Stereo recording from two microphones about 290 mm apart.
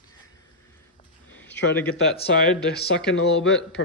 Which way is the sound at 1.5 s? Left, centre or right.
Left.